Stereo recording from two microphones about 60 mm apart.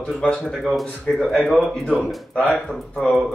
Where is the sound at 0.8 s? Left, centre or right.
Centre.